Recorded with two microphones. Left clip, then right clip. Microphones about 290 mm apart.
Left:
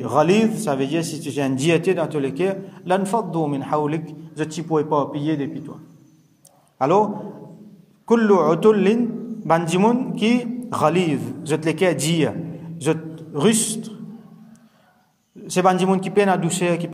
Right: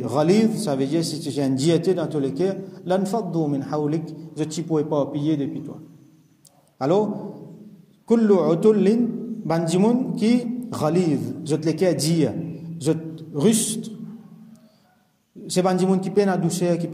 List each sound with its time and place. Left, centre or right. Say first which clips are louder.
0.0 s a man's voice: left 3 dB; centre
3.1 s a man's voice: left 3 dB; left
3.4 s a man's voice: left 3 dB; centre
6.8 s a man's voice: left 3 dB; centre
8.1 s a man's voice: left 2 dB; centre
15.4 s a man's voice: left 3 dB; centre